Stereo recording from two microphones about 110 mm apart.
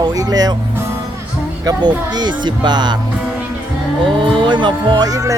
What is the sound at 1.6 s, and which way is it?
Speech, 40° right (ahead or behind).